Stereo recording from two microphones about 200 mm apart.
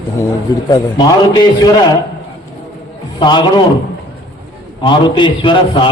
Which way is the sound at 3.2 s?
20° left (ahead or behind).